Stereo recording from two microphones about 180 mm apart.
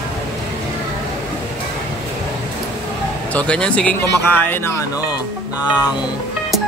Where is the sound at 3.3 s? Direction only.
5° left (ahead or behind).